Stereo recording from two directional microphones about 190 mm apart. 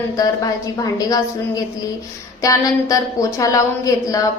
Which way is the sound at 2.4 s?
20° left (ahead or behind).